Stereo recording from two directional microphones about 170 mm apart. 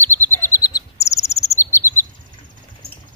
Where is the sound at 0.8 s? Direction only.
15° left (ahead or behind).